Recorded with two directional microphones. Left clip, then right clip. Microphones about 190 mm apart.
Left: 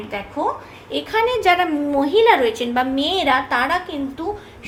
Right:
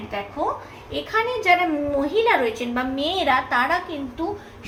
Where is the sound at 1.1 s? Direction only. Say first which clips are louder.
Left 3 dB; 50° left (ahead or behind).